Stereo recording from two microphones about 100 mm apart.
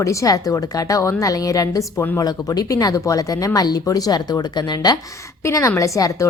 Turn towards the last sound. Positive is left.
turn(degrees=35)  # may be behind; listen again after turning